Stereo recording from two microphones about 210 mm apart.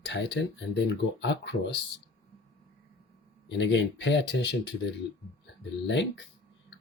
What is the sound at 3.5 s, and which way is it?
Speech, 60° left (ahead or behind).